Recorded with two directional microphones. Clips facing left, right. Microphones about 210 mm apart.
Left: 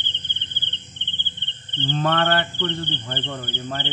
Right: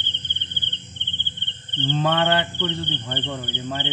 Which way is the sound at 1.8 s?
15° right (ahead or behind).